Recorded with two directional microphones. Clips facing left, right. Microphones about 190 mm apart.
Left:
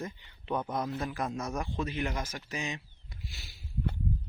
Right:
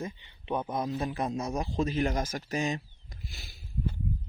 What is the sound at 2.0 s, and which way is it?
Speech, 45° right (ahead or behind).